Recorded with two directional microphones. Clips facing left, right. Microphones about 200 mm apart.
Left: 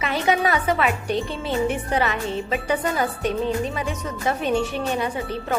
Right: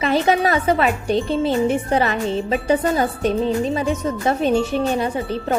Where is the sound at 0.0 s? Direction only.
30° right (ahead or behind).